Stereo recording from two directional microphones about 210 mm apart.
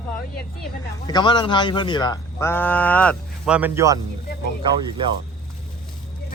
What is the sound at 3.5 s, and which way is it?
Speech, 10° right (ahead or behind).